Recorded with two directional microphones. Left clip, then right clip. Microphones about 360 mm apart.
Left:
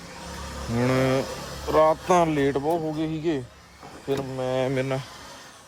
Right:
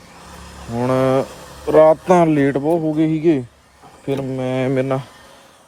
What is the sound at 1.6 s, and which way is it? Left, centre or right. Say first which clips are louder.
Speech: right 9 dB; right.